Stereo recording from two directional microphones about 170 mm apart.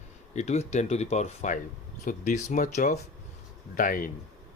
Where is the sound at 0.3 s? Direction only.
40° left (ahead or behind).